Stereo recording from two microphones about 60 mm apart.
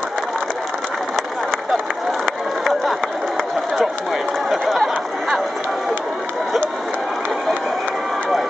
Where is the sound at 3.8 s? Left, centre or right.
Centre.